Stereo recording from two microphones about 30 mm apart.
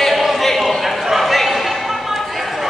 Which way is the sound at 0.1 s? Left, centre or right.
Centre.